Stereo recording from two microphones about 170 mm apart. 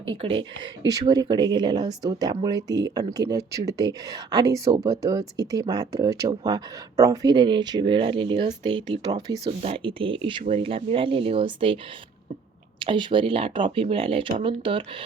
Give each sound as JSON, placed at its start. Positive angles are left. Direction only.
{"t": 0.0, "sound": "speech", "side_deg": -30}
{"t": 12.8, "sound": "speech", "side_deg": -30}